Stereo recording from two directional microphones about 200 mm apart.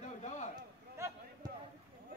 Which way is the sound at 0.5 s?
20° right (ahead or behind).